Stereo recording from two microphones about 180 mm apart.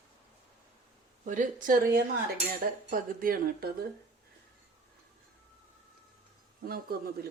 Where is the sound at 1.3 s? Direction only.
45° right (ahead or behind).